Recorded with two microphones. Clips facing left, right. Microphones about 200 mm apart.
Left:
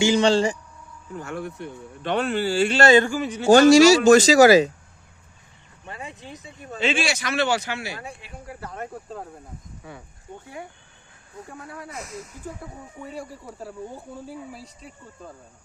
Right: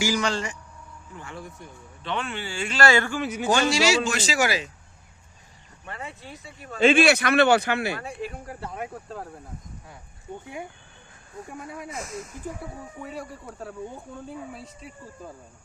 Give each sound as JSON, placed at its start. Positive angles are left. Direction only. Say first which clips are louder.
{"t": 0.0, "sound": "speech", "louder": "left 7 dB", "side_deg": 25}
{"t": 1.1, "sound": "speech", "louder": "left 8 dB", "side_deg": 45}
{"t": 1.4, "sound": "speech", "louder": "left 8 dB", "side_deg": 70}
{"t": 2.0, "sound": "speech", "louder": "left 8 dB", "side_deg": 40}
{"t": 3.2, "sound": "a man's voice", "louder": "left 1 dB", "side_deg": -5}
{"t": 3.5, "sound": "speech", "louder": "left 11 dB", "side_deg": 45}
{"t": 5.8, "sound": "speech", "louder": "left 1 dB", "side_deg": 15}
{"t": 6.7, "sound": "speech", "louder": "right 7 dB", "side_deg": -55}
{"t": 8.2, "sound": "speech", "louder": "right 12 dB", "side_deg": -40}
{"t": 8.7, "sound": "speech", "louder": "left 2 dB", "side_deg": -5}
{"t": 10.4, "sound": "speech", "louder": "right 1 dB", "side_deg": -20}
{"t": 13.0, "sound": "speech", "louder": "left 2 dB", "side_deg": 0}